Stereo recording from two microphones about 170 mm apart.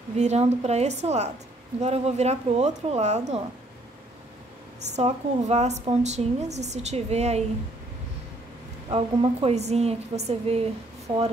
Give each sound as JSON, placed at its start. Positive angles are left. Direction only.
{"t": 0.2, "sound": "a woman's voice", "side_deg": -40}
{"t": 4.8, "sound": "a woman's voice", "side_deg": -40}
{"t": 8.9, "sound": "a woman's voice", "side_deg": -35}